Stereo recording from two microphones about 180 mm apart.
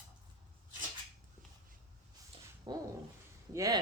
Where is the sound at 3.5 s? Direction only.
20° right (ahead or behind).